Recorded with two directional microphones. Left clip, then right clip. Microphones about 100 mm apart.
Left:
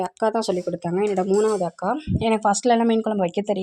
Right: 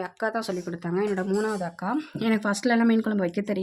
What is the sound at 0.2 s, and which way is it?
Speech, 60° left (ahead or behind).